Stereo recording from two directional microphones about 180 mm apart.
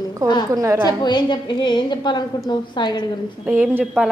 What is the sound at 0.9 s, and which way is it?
A woman's voice, 25° left (ahead or behind).